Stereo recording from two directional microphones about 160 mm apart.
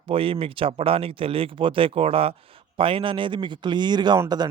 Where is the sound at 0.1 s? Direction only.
35° right (ahead or behind).